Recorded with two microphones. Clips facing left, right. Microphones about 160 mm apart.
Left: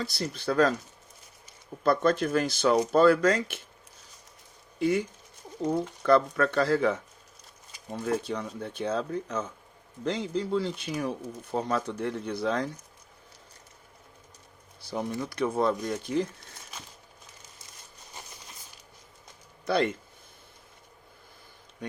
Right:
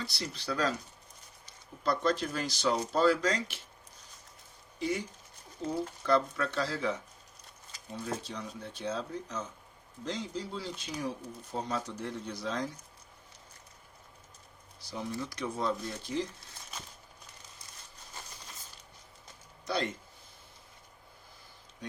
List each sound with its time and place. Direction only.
0.0 s speech: 50° left (ahead or behind)
1.8 s speech: 55° left (ahead or behind)
4.8 s speech: 50° left (ahead or behind)
14.8 s speech: 55° left (ahead or behind)
19.6 s speech: 60° left (ahead or behind)